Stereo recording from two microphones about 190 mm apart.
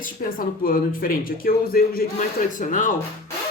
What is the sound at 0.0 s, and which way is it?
Speech, 50° left (ahead or behind).